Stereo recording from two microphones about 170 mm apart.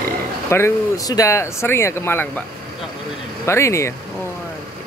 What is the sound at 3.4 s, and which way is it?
Speech, 15° left (ahead or behind).